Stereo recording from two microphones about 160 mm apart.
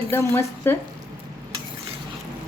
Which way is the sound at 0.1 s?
15° left (ahead or behind).